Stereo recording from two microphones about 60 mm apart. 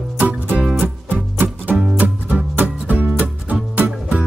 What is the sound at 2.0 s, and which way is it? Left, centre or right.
Music, right.